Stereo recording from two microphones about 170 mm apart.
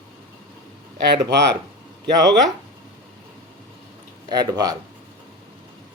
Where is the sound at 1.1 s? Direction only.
90° right.